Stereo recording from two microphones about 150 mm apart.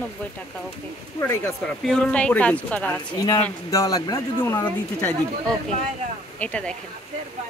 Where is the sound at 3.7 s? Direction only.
25° left (ahead or behind).